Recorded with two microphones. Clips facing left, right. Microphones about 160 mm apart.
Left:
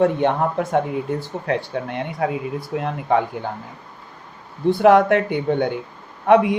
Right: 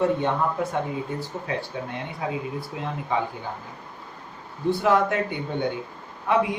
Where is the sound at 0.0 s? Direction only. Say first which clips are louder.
Left 5 dB; 65° left (ahead or behind).